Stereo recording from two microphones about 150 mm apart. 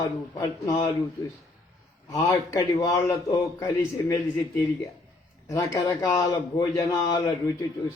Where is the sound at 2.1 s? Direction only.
20° left (ahead or behind).